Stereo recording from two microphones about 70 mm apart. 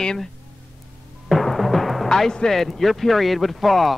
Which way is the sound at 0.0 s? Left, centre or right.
Centre.